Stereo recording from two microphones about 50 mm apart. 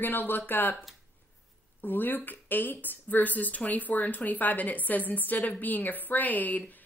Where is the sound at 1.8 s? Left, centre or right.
Left.